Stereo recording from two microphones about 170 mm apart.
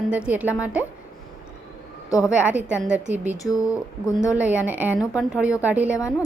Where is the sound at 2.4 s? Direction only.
10° right (ahead or behind).